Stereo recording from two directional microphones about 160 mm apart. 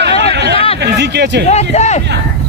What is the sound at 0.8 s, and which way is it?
Speech, 90° right.